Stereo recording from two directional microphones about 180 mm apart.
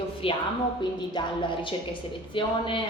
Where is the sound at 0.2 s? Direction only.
30° left (ahead or behind).